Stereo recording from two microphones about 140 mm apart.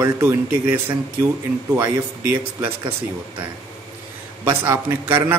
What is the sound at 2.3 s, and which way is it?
Speech, 15° right (ahead or behind).